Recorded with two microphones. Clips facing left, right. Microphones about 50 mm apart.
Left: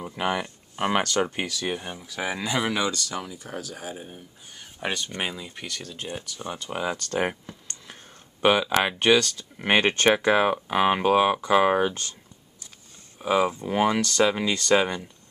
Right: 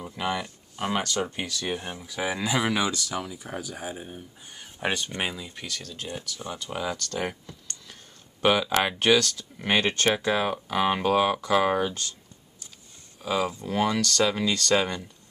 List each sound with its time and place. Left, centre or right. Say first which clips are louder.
0.1 s a sound: left 3 dB; left
1.2 s speech: left 3 dB; left
1.5 s speech: left 1 dB; centre
7.1 s speech: left 4 dB; left
8.4 s speech: left 2 dB; centre
9.6 s speech: left 3 dB; left
10.7 s speech: left 1 dB; centre
11.8 s a sound: left 3 dB; left
13.2 s speech: left 4 dB; left